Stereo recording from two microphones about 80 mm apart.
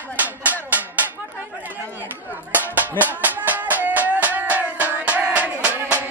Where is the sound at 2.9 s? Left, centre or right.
Left.